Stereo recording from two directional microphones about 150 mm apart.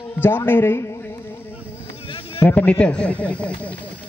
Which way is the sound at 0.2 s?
15° left (ahead or behind).